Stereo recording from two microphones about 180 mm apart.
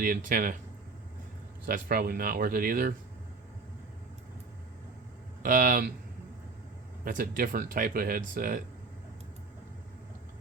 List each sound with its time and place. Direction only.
0.3 s speech: 50° right (ahead or behind)
1.6 s speech: 55° right (ahead or behind)
5.4 s speech: 50° right (ahead or behind)
7.0 s speech: 50° right (ahead or behind)